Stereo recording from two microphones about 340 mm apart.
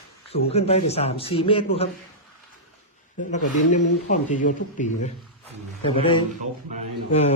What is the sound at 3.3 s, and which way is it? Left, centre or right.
Speech, left.